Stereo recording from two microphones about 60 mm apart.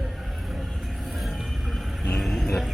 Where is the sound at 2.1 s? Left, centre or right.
Centre.